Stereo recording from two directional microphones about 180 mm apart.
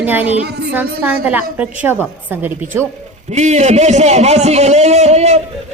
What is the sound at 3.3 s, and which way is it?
A man's voice, 40° right (ahead or behind).